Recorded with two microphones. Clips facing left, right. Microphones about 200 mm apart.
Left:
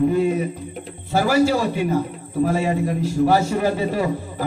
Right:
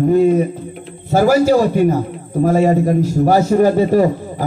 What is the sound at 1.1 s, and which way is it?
Speech, 45° right (ahead or behind).